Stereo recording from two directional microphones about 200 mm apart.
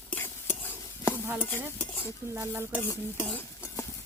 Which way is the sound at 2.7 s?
10° left (ahead or behind).